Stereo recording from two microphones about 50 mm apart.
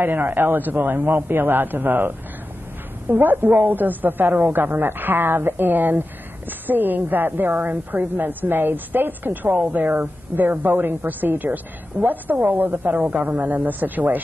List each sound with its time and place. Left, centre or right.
0.0 s a woman's voice: right